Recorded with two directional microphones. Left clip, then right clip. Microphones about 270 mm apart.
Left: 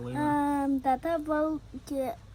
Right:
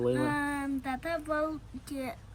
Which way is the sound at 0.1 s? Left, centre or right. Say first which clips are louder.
Left 2 dB; left.